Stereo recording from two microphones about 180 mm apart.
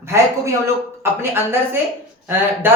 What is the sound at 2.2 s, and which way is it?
Speech, 10° right (ahead or behind).